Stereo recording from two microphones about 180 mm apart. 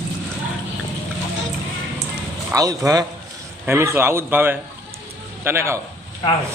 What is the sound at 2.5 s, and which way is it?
A man's voice, 20° right (ahead or behind).